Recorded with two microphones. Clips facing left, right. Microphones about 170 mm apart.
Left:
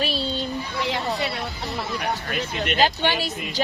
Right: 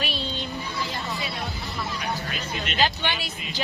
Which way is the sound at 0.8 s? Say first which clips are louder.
Left 8 dB; 70° left (ahead or behind).